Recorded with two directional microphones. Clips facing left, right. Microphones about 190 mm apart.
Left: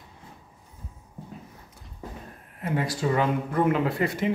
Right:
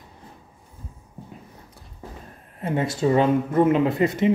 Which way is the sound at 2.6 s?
25° right (ahead or behind).